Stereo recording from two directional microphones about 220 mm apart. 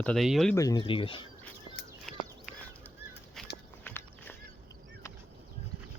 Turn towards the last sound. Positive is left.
turn(degrees=10)  # may be behind; listen again after turning